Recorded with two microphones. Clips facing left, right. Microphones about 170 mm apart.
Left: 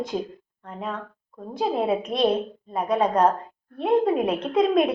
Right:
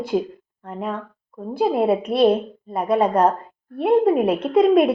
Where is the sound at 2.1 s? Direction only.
10° right (ahead or behind).